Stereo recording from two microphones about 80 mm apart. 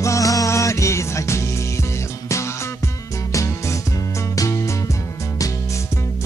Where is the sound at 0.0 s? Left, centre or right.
Left.